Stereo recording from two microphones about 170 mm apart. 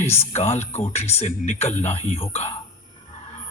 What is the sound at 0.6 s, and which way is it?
Speech, 40° left (ahead or behind).